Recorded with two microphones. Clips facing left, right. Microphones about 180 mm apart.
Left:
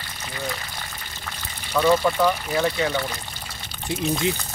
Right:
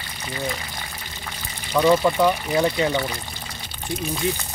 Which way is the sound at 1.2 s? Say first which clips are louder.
Right 1 dB; 10° right (ahead or behind).